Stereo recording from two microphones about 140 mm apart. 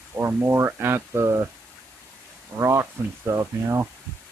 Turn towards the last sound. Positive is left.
turn(degrees=-20)  # may be behind; listen again after turning